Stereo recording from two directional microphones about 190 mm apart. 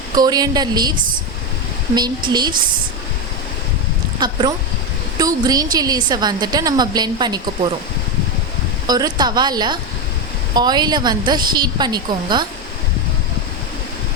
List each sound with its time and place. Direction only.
0.1 s a woman's voice: 20° right (ahead or behind)
2.0 s a woman's voice: 20° right (ahead or behind)
4.2 s a woman's voice: 25° right (ahead or behind)
8.9 s a woman's voice: 20° right (ahead or behind)